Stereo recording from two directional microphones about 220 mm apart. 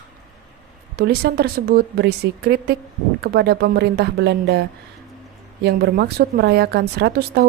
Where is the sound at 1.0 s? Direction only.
45° right (ahead or behind).